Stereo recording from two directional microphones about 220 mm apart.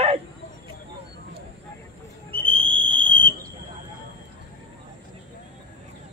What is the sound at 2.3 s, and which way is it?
Whistle, 25° right (ahead or behind).